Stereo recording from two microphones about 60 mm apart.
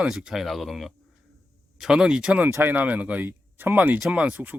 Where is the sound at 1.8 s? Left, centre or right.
Centre.